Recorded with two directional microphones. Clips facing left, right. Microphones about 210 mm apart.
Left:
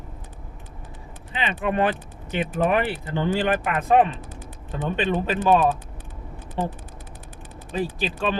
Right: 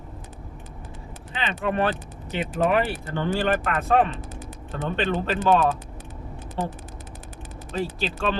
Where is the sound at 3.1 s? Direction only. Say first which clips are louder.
Left 1 dB; 15° left (ahead or behind).